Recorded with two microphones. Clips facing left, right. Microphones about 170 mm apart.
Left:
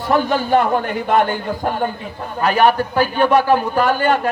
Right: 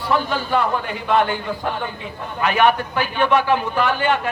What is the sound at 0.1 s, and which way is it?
A man's voice, 45° left (ahead or behind).